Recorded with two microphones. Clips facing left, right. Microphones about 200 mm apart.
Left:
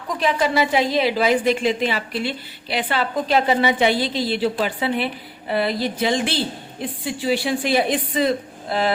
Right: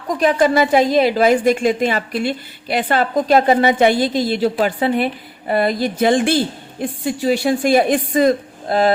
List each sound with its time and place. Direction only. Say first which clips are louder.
0.2 s a woman's voice: right 5 dB; 45° right (ahead or behind)